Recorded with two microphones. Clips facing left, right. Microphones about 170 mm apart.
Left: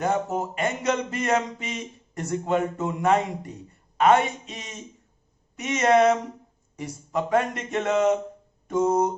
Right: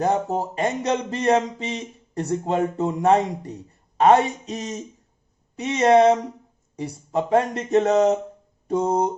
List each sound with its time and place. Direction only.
0.0 s speech: 35° right (ahead or behind)
8.6 s music: 35° right (ahead or behind)